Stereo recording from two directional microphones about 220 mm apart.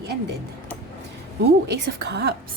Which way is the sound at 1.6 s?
50° right (ahead or behind).